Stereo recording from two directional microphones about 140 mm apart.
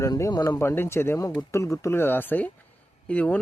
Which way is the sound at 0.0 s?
25° left (ahead or behind).